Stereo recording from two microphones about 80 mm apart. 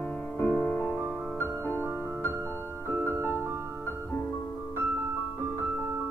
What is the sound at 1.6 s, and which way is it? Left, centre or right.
Music, left.